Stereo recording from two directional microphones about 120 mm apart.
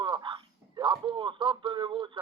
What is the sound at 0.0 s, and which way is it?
Speech, 40° right (ahead or behind).